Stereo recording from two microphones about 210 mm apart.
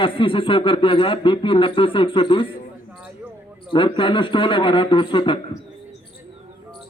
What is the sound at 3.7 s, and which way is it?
A man's voice, 25° left (ahead or behind).